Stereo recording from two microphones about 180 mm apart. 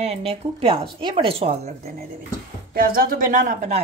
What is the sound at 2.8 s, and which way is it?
Speech, 55° right (ahead or behind).